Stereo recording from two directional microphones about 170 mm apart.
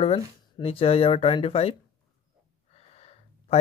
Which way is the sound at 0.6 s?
35° left (ahead or behind).